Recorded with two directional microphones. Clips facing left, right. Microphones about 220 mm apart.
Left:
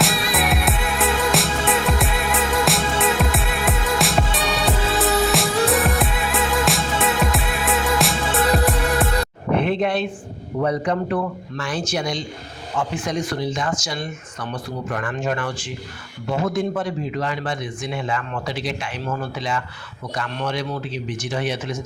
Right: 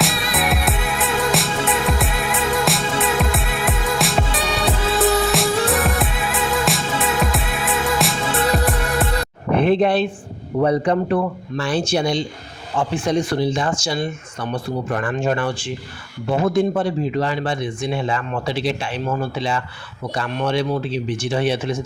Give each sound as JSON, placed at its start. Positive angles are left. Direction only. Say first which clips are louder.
{"t": 0.0, "sound": "music", "louder": "even", "side_deg": 0}
{"t": 9.6, "sound": "a sound", "louder": "right 5 dB", "side_deg": -35}
{"t": 10.6, "sound": "speech", "louder": "right 4 dB", "side_deg": -30}